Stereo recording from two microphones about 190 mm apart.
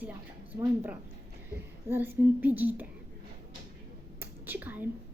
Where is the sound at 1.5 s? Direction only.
10° right (ahead or behind).